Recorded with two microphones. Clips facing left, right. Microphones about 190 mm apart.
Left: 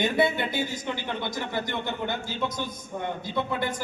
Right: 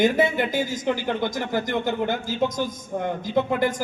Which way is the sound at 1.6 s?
90° right.